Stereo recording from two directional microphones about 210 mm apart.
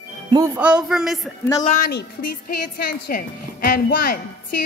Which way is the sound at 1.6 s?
40° left (ahead or behind).